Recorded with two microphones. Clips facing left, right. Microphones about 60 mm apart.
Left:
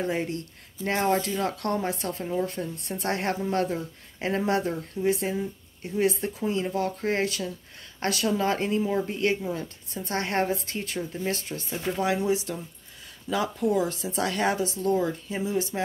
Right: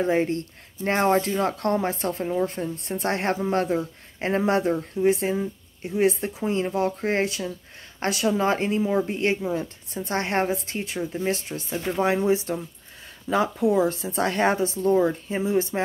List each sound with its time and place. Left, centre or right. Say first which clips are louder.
0.0 s a woman's voice: right 6 dB; right
11.9 s a woman's voice: right 4 dB; right